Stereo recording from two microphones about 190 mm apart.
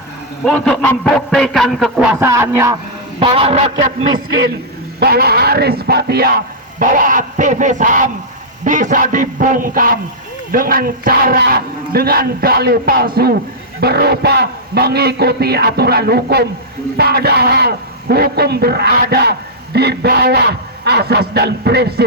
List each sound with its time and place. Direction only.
0.4 s a man's voice: 5° left (ahead or behind)
2.1 s speech: 15° right (ahead or behind)
3.2 s a man's voice: 30° right (ahead or behind)
4.9 s a man's voice: 55° right (ahead or behind)
6.7 s a man's voice: 45° right (ahead or behind)